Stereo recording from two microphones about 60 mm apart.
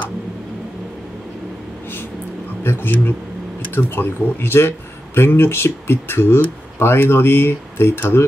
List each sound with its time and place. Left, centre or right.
2.6 s speech: left